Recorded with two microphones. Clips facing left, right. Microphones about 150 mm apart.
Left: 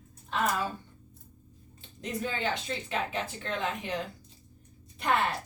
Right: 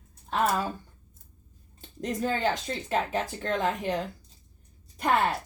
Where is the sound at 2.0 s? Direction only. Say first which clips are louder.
Right 5 dB; 40° right (ahead or behind).